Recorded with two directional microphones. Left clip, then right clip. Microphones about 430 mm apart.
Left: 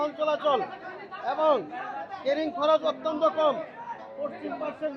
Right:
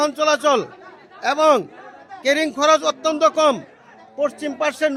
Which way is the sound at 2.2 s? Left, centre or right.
Right.